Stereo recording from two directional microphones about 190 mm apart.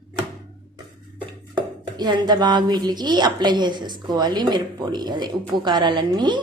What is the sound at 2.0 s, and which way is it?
A woman's voice, 20° right (ahead or behind).